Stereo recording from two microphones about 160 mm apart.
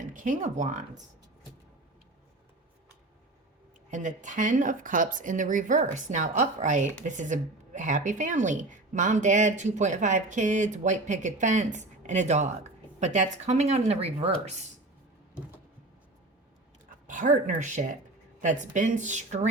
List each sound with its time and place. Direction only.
0.0 s speech: 55° right (ahead or behind)
3.9 s speech: 50° right (ahead or behind)
17.1 s speech: 50° right (ahead or behind)